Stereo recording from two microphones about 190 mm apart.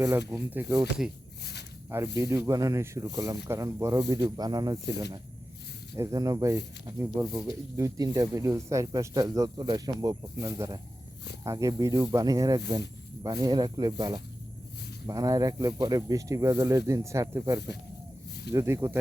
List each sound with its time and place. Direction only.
0.3 s speech: 15° right (ahead or behind)
0.8 s speech: 5° right (ahead or behind)
2.1 s speech: 15° right (ahead or behind)